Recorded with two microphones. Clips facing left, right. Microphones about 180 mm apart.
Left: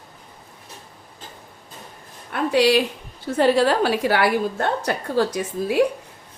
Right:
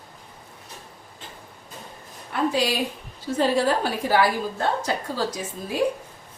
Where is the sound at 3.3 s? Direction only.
70° left (ahead or behind).